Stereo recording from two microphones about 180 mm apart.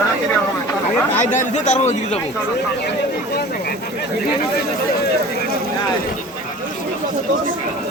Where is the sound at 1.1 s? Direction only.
40° left (ahead or behind).